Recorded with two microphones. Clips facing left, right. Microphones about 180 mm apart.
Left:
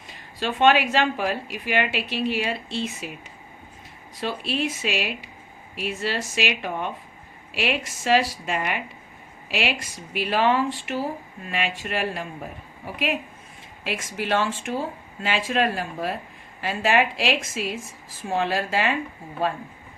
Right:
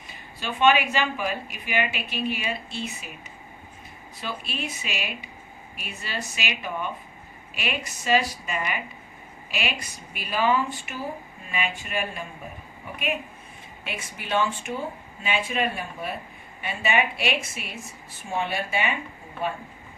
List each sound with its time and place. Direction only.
0.3 s a woman's voice: 75° left (ahead or behind)
4.4 s a woman's voice: 85° left
13.8 s a woman's voice: 85° left